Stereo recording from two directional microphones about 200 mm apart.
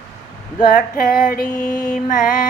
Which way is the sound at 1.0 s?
40° left (ahead or behind).